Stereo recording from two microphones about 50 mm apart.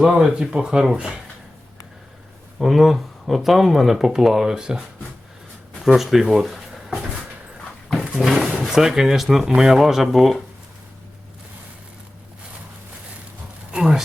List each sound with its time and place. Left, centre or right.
0.0 s speech: centre
2.6 s speech: centre
5.8 s speech: centre
7.9 s a sound: centre
8.7 s speech: centre
13.7 s a sound: centre